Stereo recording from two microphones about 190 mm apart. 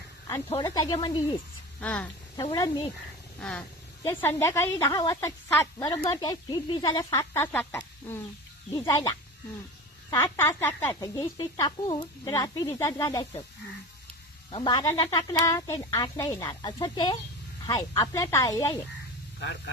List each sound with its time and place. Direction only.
0.5 s speech: 20° left (ahead or behind)
1.8 s a woman's voice: 5° left (ahead or behind)
2.3 s speech: 20° left (ahead or behind)
4.0 s a woman's voice: 10° left (ahead or behind)
10.2 s a woman's voice: 10° left (ahead or behind)
14.5 s a woman's voice: 25° left (ahead or behind)
19.4 s speech: 70° left (ahead or behind)